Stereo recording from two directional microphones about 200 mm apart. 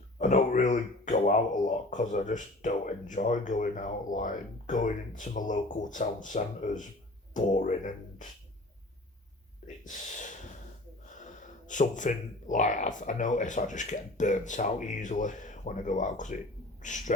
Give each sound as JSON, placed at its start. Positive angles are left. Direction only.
{"t": 0.2, "sound": "speech", "side_deg": 35}
{"t": 9.8, "sound": "speech", "side_deg": 40}